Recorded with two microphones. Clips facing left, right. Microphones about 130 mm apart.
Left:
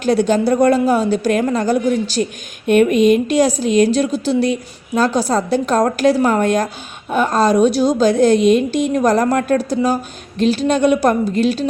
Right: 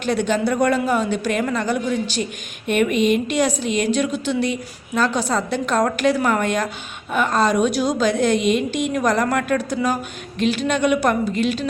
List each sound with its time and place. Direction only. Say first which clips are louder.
0.0 s a woman's voice: left 5 dB; 40° left (ahead or behind)